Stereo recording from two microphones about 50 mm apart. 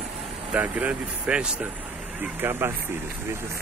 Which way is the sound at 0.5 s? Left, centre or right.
Right.